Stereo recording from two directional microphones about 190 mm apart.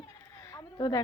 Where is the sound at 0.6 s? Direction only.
20° left (ahead or behind).